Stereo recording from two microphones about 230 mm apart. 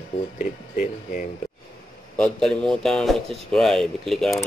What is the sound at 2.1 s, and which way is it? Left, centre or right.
Bell, centre.